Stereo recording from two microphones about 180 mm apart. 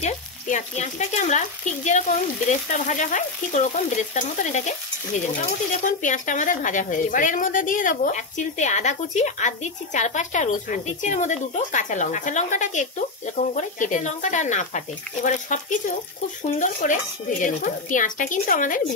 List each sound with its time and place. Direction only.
0.0 s frying: 40° left (ahead or behind)
2.7 s a woman's voice: 45° left (ahead or behind)
5.9 s a woman's voice: 45° left (ahead or behind)